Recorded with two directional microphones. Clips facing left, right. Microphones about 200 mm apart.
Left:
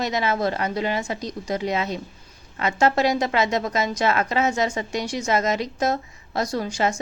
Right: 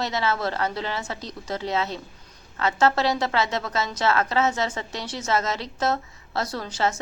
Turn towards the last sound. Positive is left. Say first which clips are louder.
# left 3 dB
turn(degrees=15)  # may be behind; listen again after turning